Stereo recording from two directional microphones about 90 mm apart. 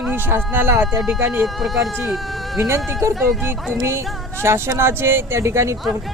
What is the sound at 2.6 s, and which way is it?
Speech, 30° right (ahead or behind).